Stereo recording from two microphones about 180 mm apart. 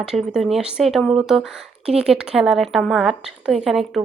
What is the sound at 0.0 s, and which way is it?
Speech, 5° right (ahead or behind).